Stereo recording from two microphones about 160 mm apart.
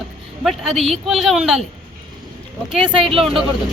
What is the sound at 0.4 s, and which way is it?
Speech, centre (ahead or behind).